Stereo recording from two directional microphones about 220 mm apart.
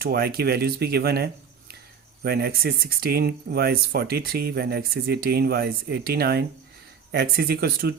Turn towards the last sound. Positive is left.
turn(degrees=-45)  # may be behind; listen again after turning